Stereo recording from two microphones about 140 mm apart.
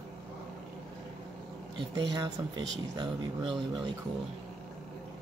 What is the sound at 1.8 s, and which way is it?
Speech, 30° right (ahead or behind).